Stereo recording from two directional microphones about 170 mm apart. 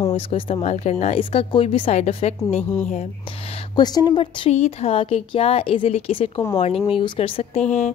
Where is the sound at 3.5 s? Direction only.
25° left (ahead or behind).